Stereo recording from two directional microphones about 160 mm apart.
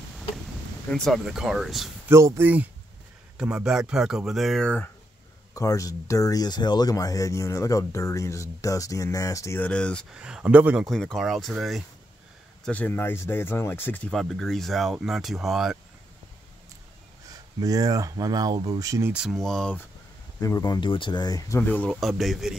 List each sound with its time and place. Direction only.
0.9 s speech: centre (ahead or behind)
2.0 s speech: 15° right (ahead or behind); by 4.9 s 10° left (ahead or behind)
5.5 s speech: 20° left (ahead or behind)
10.1 s speech: 5° right (ahead or behind)
12.6 s speech: 10° left (ahead or behind)
14.1 s speech: centre (ahead or behind)
17.6 s speech: 20° right (ahead or behind)
19.1 s speech: centre (ahead or behind)
20.3 s speech: 20° left (ahead or behind)
21.5 s speech: 10° left (ahead or behind)
22.0 s speech: centre (ahead or behind)